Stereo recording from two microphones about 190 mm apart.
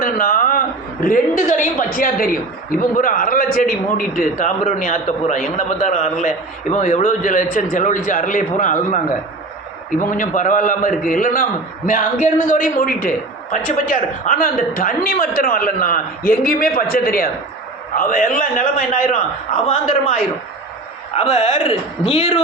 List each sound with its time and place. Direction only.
0.0 s a sound: 50° left (ahead or behind)
1.0 s a woman's voice: 45° left (ahead or behind)
19.6 s a man's voice: 35° left (ahead or behind)
21.2 s a man's voice: 35° left (ahead or behind)